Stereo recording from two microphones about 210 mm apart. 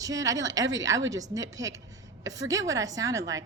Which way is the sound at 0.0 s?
15° right (ahead or behind).